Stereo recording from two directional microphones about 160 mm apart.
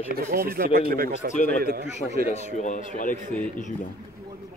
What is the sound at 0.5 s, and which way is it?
Speech, 70° right (ahead or behind).